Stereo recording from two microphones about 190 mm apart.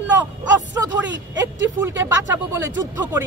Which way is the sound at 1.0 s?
70° right (ahead or behind).